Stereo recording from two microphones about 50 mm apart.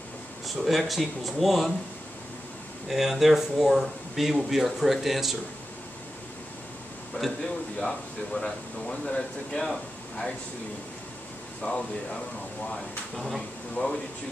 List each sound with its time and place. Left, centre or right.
0.6 s speech: centre
2.9 s speech: centre
7.2 s speech: left
11.6 s speech: centre
12.7 s speech: centre
13.8 s speech: left